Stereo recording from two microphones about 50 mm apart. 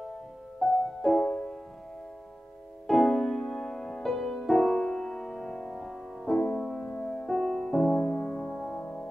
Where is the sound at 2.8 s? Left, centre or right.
Centre.